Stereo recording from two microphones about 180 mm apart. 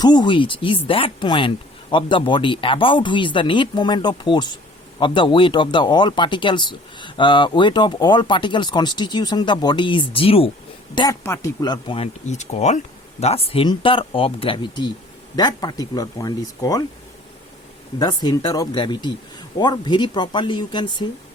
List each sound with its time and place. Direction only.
0.0 s speech: 25° left (ahead or behind)
10.9 s speech: 20° left (ahead or behind)
12.2 s speech: 40° left (ahead or behind); by 16.8 s 20° left (ahead or behind)
18.0 s speech: 25° left (ahead or behind)